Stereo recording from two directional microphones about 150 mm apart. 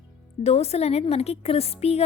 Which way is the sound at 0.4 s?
45° left (ahead or behind).